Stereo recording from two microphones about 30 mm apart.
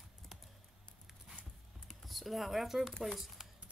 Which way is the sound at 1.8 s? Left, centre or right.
Centre.